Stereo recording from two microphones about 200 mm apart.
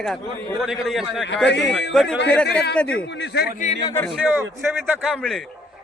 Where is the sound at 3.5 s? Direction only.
35° left (ahead or behind).